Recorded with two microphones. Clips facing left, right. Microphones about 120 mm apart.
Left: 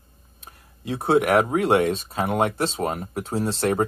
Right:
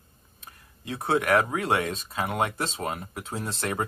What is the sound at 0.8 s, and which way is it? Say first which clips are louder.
Speech: left 6 dB; 25° left (ahead or behind).